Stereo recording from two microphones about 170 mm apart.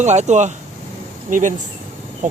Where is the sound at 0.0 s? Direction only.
45° right (ahead or behind).